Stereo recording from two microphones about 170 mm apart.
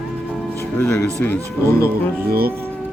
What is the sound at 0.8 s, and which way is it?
Speech, 10° left (ahead or behind).